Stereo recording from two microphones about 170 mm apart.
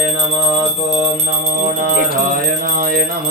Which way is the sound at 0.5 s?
25° right (ahead or behind).